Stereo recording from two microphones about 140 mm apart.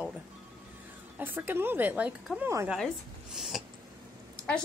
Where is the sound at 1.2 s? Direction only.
15° right (ahead or behind).